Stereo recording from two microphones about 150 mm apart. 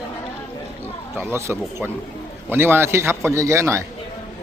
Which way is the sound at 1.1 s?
15° right (ahead or behind).